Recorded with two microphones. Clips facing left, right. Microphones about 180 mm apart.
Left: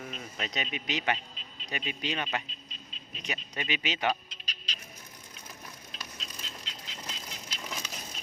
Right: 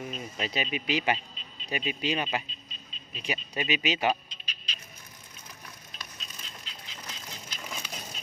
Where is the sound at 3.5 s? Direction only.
15° right (ahead or behind).